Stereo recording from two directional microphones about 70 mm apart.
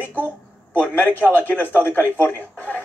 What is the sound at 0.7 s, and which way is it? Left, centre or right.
A man's voice, left.